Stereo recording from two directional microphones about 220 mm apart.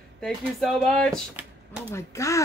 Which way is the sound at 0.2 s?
Centre (ahead or behind).